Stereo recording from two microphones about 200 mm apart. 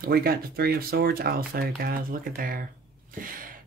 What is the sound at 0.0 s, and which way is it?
Speech, 50° right (ahead or behind).